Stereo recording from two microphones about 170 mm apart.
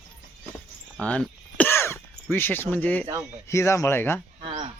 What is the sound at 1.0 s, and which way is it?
Throat clearing, 5° left (ahead or behind).